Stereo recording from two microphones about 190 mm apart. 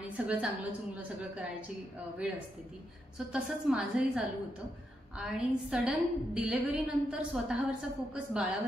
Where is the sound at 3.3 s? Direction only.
5° right (ahead or behind).